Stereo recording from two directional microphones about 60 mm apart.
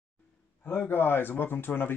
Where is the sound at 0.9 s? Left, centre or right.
Left.